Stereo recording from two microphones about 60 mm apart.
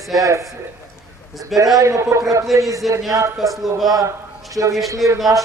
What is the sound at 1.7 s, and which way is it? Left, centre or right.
Speech, right.